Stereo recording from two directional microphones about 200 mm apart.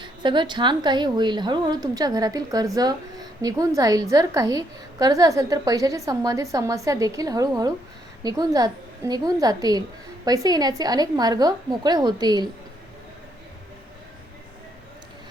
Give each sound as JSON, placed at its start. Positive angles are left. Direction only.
{"t": 0.0, "sound": "a woman's voice", "side_deg": -20}